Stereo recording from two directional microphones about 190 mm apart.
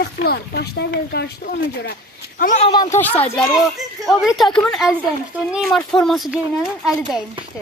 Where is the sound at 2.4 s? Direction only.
40° left (ahead or behind).